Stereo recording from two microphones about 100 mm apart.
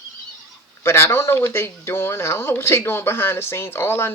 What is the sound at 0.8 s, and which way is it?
Speech, 25° left (ahead or behind).